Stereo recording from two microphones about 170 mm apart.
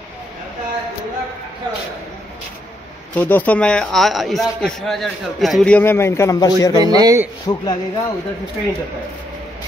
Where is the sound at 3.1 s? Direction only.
10° left (ahead or behind).